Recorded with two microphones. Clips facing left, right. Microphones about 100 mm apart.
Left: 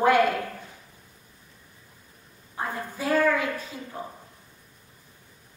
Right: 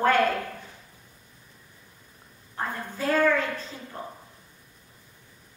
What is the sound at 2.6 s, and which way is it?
A woman's voice, 10° left (ahead or behind).